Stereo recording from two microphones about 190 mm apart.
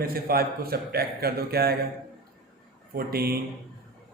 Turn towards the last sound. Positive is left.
turn(degrees=-55)  # may be behind; listen again after turning